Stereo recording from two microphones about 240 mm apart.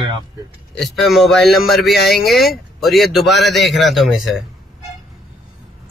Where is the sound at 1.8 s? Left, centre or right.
Left.